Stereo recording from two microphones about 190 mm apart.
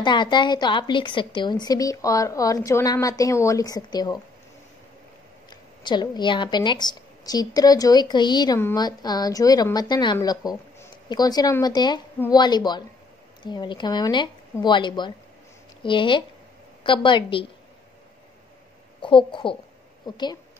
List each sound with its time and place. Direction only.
0.0 s a woman's voice: 25° left (ahead or behind)
5.5 s a woman's voice: 25° left (ahead or behind)
18.9 s a woman's voice: 25° left (ahead or behind)